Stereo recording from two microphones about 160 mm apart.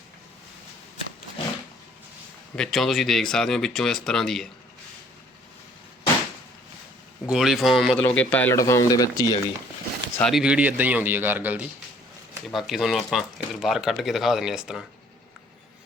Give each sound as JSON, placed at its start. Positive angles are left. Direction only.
{"t": 2.6, "sound": "speech", "side_deg": 0}
{"t": 7.3, "sound": "speech", "side_deg": 0}
{"t": 10.2, "sound": "speech", "side_deg": 5}
{"t": 10.4, "sound": "a man's voice", "side_deg": -10}